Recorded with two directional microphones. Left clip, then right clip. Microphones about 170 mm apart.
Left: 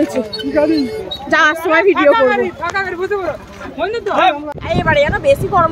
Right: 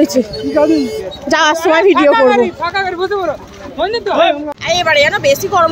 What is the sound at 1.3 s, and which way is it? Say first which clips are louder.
Speech: right 1 dB; 30° right (ahead or behind).